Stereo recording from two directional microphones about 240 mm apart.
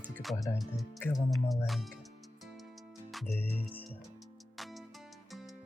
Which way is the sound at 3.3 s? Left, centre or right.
Centre.